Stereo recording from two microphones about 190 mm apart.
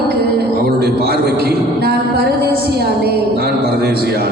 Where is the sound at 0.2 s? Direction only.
55° right (ahead or behind).